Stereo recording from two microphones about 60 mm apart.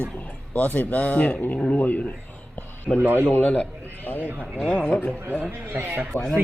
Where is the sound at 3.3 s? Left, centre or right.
Left.